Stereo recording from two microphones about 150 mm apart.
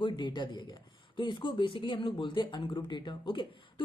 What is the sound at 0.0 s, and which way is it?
Speech, 30° left (ahead or behind).